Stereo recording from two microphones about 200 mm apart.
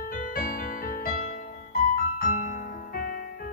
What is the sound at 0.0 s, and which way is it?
Music, 45° left (ahead or behind).